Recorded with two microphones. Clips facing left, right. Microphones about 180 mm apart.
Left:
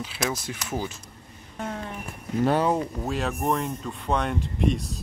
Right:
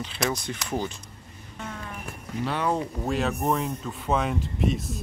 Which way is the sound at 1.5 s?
40° left (ahead or behind).